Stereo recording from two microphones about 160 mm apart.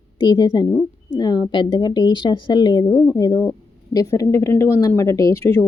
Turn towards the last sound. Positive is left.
turn(degrees=20)  # may be behind; listen again after turning